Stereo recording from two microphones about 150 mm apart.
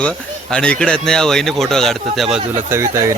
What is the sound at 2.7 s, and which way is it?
Speech, 20° right (ahead or behind).